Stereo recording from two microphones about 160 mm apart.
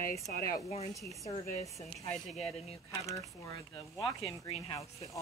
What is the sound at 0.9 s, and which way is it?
Speech, 20° left (ahead or behind).